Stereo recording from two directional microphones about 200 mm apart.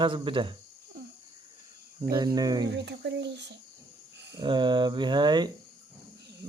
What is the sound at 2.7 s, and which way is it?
Child singing, 60° right (ahead or behind).